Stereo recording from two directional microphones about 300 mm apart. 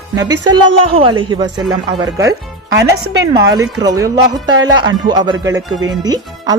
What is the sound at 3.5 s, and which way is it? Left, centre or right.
Speech, centre.